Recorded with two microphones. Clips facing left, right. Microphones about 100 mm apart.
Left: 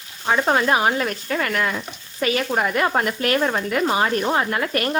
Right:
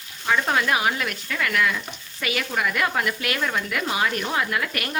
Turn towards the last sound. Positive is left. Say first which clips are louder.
# left 4 dB
turn(degrees=35)  # may be behind; listen again after turning